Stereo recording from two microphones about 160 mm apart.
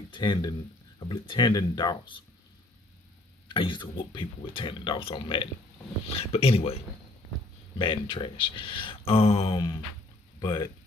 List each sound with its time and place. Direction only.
0.1 s speech: 30° left (ahead or behind)
3.4 s speech: 30° left (ahead or behind)
7.8 s speech: 30° left (ahead or behind)
10.4 s speech: 25° left (ahead or behind)